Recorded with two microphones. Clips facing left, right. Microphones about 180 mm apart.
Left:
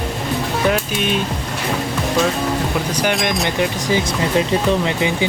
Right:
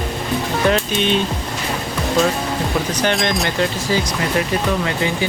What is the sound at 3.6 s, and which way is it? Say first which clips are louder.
Speech: left 1 dB; 20° left (ahead or behind).